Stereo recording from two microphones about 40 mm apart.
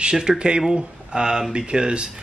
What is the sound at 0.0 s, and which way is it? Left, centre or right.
A man's voice, right.